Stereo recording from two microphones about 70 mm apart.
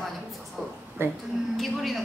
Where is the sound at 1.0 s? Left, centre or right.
Right.